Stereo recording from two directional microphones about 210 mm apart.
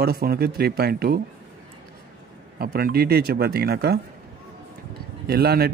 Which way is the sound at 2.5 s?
45° right (ahead or behind).